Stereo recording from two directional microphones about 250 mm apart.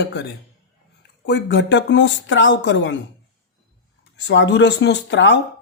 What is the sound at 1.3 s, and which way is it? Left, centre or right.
Speech, left.